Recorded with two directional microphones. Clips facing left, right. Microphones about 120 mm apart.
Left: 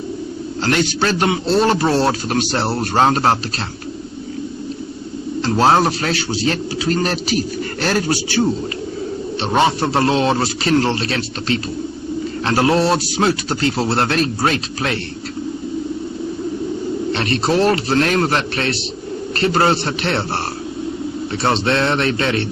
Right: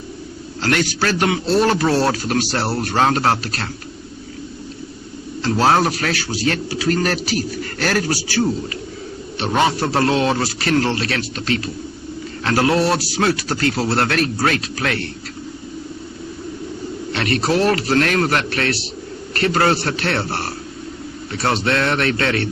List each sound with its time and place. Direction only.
0.6 s a man's voice: 25° left (ahead or behind)
5.4 s a man's voice: 25° left (ahead or behind)
17.1 s a man's voice: 30° left (ahead or behind)
21.4 s a man's voice: 25° left (ahead or behind)